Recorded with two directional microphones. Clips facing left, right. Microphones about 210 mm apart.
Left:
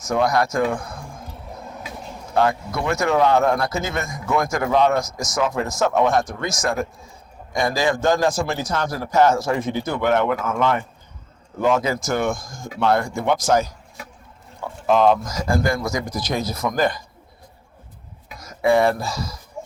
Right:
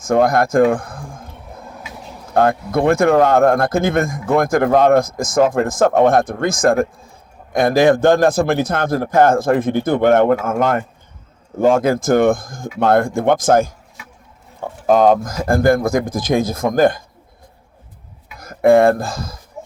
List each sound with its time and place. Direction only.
0.0 s speech: 50° right (ahead or behind)
2.3 s a man's voice: 55° right (ahead or behind)
18.3 s speech: 55° right (ahead or behind)